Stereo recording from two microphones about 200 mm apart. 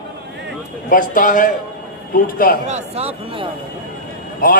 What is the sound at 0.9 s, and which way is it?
Speech, 40° left (ahead or behind).